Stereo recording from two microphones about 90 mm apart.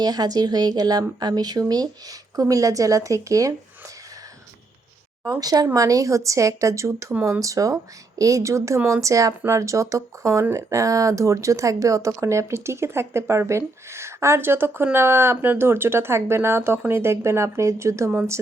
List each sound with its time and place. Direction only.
0.0 s a woman's voice: 45° right (ahead or behind)
5.2 s a woman's voice: 40° right (ahead or behind)